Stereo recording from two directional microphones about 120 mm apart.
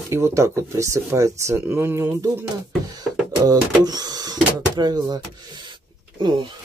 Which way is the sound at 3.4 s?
30° right (ahead or behind).